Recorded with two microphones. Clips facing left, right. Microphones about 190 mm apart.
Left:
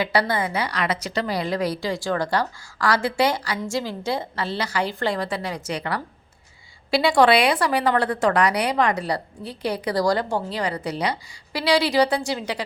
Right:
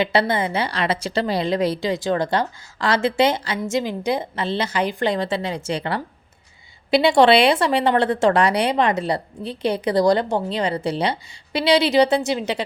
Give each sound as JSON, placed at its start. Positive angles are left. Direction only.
{"t": 0.0, "sound": "a woman's voice", "side_deg": -25}